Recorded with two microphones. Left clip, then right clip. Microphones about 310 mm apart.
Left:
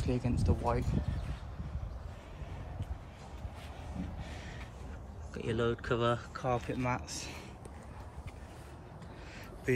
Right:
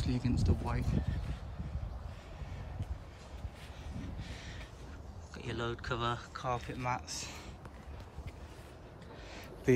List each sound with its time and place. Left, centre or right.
0.0 s speech: centre
4.2 s a sound: centre
5.3 s speech: centre